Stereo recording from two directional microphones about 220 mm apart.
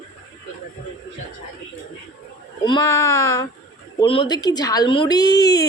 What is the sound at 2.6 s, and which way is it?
A woman's voice, 20° left (ahead or behind).